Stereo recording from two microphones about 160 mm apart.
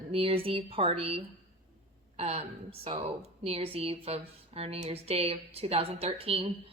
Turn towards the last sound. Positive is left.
turn(degrees=-35)  # may be behind; listen again after turning